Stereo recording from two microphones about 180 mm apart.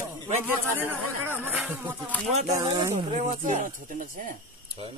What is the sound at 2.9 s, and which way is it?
Speech, 40° right (ahead or behind).